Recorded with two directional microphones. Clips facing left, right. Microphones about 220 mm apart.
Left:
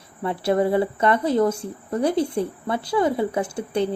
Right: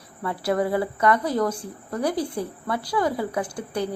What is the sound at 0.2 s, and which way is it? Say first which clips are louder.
Speech: left 3 dB; 25° left (ahead or behind).